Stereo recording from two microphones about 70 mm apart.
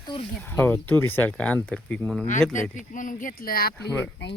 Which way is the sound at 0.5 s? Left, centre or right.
Left.